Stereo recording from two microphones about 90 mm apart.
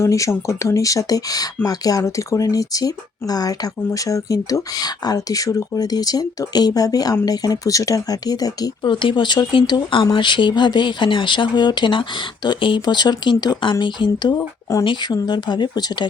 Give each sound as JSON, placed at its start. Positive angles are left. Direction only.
{"t": 0.0, "sound": "speech", "side_deg": 35}
{"t": 8.8, "sound": "speech", "side_deg": 65}
{"t": 14.3, "sound": "speech", "side_deg": 35}
{"t": 14.8, "sound": "speech", "side_deg": 55}